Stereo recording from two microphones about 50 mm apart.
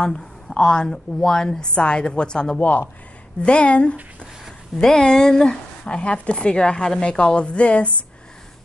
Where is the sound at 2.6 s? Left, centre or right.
Left.